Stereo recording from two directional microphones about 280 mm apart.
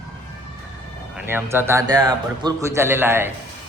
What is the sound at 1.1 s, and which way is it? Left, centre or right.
A man's voice, centre.